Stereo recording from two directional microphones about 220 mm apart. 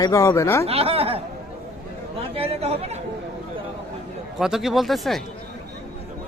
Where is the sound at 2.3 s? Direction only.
25° right (ahead or behind).